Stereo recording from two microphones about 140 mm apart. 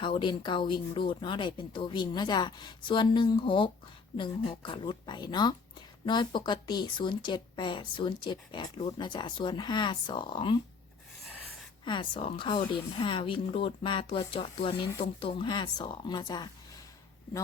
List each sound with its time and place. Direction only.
0.0 s a woman's voice: 35° left (ahead or behind)
11.9 s a woman's voice: 35° left (ahead or behind)